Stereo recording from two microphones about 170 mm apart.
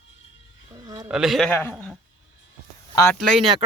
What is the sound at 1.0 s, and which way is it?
Speech, 5° right (ahead or behind).